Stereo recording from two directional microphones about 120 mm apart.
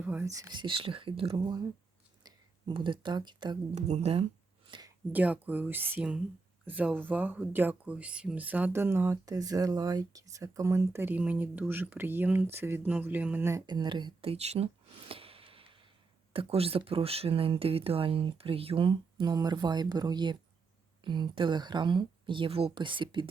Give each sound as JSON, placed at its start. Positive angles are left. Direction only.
{"t": 0.0, "sound": "whispering", "side_deg": -15}
{"t": 0.3, "sound": "speech", "side_deg": -25}
{"t": 0.5, "sound": "speech", "side_deg": -45}
{"t": 3.8, "sound": "speech", "side_deg": -70}
{"t": 5.1, "sound": "speech", "side_deg": -15}
{"t": 13.7, "sound": "a sound", "side_deg": -40}
{"t": 16.3, "sound": "speech", "side_deg": -50}